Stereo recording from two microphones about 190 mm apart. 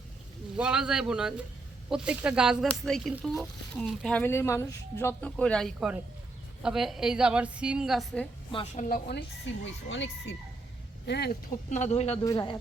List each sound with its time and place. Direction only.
0.5 s speech: 5° right (ahead or behind)
8.5 s speech: 40° left (ahead or behind)
9.6 s speech: 75° left (ahead or behind)
11.0 s speech: 60° left (ahead or behind)
11.7 s speech: 35° left (ahead or behind)
12.2 s speech: 20° left (ahead or behind)